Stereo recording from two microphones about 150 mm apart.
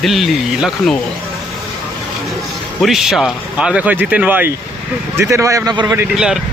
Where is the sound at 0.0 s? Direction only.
Centre (ahead or behind).